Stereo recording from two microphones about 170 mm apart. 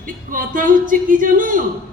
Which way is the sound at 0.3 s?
55° right (ahead or behind).